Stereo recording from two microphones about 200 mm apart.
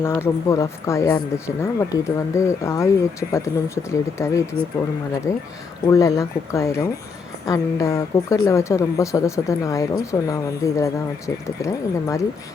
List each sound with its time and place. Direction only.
0.0 s speech: 10° left (ahead or behind)